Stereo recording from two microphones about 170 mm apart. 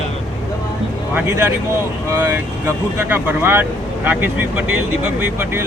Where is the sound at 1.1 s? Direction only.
15° right (ahead or behind).